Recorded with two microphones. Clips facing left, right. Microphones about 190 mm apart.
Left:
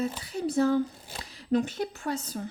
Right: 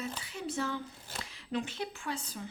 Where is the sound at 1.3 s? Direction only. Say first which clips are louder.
Left 10 dB; 40° left (ahead or behind).